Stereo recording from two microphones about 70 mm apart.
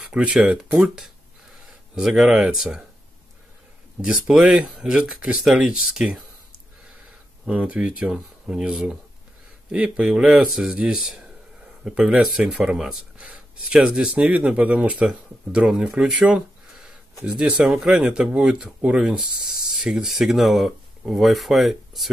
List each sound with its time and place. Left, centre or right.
0.1 s speech: centre
4.0 s speech: centre
7.5 s speech: centre
9.9 s speech: centre
12.5 s speech: centre